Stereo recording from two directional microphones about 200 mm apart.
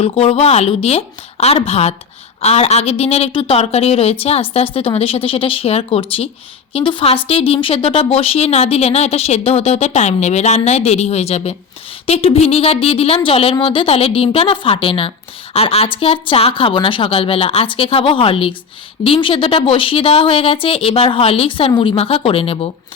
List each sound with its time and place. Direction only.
0.0 s speech: 25° left (ahead or behind)